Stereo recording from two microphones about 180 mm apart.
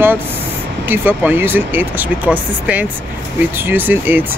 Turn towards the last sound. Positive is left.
turn(degrees=-10)  # may be behind; listen again after turning